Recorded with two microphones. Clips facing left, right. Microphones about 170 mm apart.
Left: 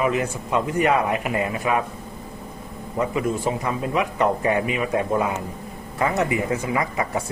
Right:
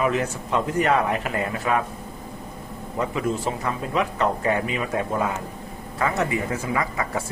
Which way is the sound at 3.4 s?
10° left (ahead or behind).